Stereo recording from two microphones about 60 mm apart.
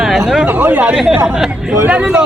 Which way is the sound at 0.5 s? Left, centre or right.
Right.